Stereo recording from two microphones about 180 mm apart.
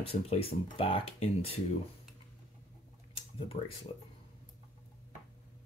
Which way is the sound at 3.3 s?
30° left (ahead or behind).